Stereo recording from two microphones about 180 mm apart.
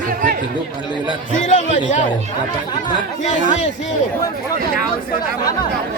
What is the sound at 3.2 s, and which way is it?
Speech, 40° left (ahead or behind).